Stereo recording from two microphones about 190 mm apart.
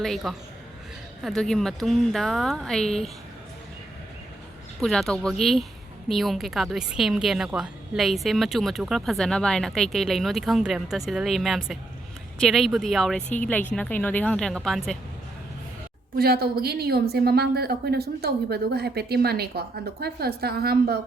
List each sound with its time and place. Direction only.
0.0 s a woman's voice: centre (ahead or behind)
4.8 s a woman's voice: centre (ahead or behind)
16.1 s a woman's voice: 55° right (ahead or behind)